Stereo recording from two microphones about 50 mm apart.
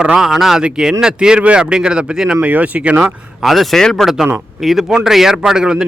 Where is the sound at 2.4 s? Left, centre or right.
Right.